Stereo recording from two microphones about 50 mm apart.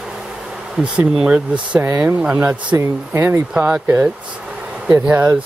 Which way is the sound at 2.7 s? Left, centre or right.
Right.